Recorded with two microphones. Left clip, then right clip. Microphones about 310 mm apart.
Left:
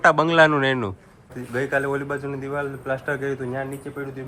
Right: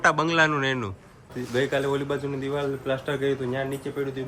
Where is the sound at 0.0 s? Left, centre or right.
Centre.